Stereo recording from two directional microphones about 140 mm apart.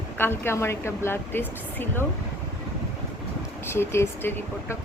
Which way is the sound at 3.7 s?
20° left (ahead or behind).